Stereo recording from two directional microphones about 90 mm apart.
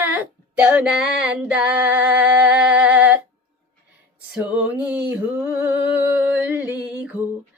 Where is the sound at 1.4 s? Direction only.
15° right (ahead or behind).